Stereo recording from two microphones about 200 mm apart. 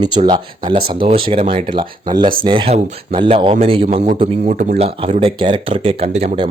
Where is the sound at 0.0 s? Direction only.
20° right (ahead or behind).